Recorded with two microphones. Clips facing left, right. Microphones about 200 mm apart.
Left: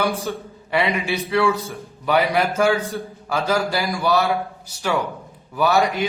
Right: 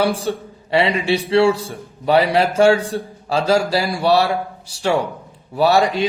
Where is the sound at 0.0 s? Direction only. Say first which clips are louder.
Right 4 dB; 30° right (ahead or behind).